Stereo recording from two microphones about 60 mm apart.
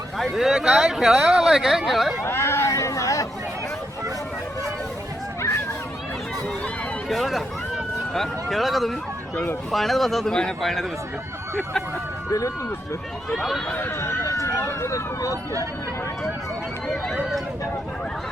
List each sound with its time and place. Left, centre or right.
0.2 s speech: centre
2.2 s hubbub: left
7.1 s speech: centre
13.3 s speech: centre
13.7 s speech: left
14.3 s speech: left